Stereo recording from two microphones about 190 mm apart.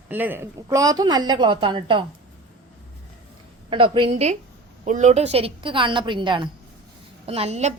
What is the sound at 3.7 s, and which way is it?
A woman's voice, 25° right (ahead or behind).